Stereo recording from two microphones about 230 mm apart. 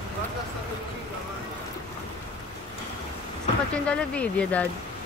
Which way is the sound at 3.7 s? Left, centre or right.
Centre.